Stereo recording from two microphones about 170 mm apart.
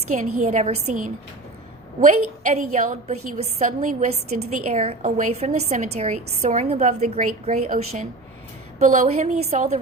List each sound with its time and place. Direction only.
0.1 s a woman's voice: 45° right (ahead or behind)